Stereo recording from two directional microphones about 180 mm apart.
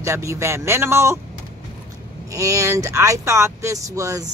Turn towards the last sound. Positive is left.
turn(degrees=-15)  # may be behind; listen again after turning